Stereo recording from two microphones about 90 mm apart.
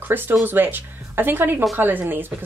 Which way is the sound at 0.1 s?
20° right (ahead or behind).